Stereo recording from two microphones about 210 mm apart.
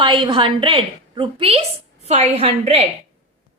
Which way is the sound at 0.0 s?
25° right (ahead or behind).